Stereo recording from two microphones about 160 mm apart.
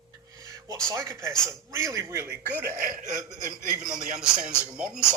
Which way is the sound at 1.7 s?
20° right (ahead or behind).